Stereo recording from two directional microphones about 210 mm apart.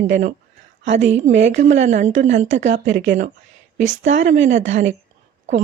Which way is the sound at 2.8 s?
60° right (ahead or behind).